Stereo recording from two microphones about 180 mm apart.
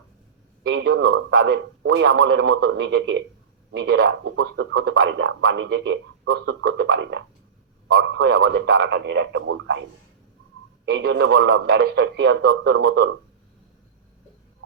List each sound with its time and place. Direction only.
0.6 s speech: 70° right (ahead or behind)
10.9 s speech: 70° right (ahead or behind)